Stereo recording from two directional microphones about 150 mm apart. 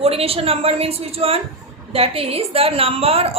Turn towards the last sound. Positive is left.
turn(degrees=-40)  # may be behind; listen again after turning